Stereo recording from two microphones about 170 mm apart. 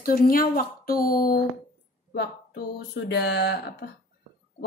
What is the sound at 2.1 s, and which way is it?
Speech, 90° left.